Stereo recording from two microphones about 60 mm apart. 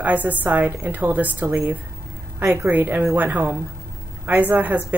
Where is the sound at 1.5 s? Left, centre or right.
Right.